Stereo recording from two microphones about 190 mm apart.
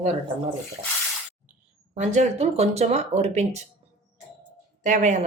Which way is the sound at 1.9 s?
35° right (ahead or behind).